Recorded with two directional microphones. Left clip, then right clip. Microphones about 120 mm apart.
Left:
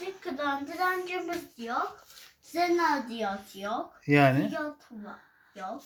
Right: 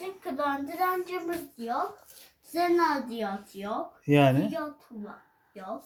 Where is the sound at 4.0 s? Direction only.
30° right (ahead or behind).